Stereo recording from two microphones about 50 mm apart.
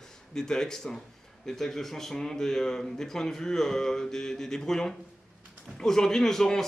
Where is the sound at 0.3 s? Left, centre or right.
Centre.